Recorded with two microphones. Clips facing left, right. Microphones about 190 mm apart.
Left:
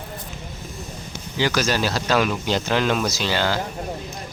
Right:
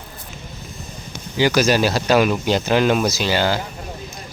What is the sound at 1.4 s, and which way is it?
Speech, 10° right (ahead or behind).